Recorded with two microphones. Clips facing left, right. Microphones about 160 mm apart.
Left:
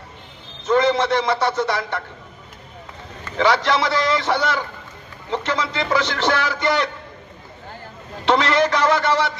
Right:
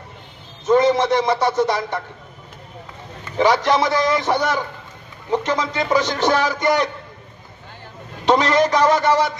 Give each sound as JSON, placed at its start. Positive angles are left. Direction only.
{"t": 0.7, "sound": "speech", "side_deg": -15}
{"t": 3.3, "sound": "speech", "side_deg": -15}
{"t": 8.3, "sound": "speech", "side_deg": -15}